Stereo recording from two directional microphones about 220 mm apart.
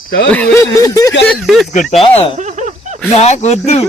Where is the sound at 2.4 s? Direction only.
35° right (ahead or behind).